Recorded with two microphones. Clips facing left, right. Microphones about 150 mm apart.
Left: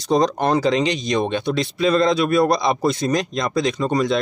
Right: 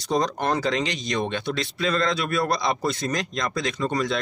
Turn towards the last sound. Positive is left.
turn(degrees=20)  # may be behind; listen again after turning